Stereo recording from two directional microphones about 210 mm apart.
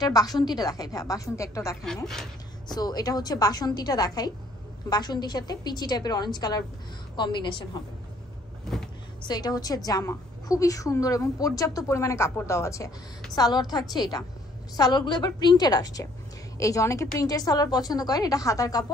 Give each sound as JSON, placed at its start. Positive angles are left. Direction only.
{"t": 0.0, "sound": "a woman's voice", "side_deg": 20}
{"t": 9.2, "sound": "a woman's voice", "side_deg": 20}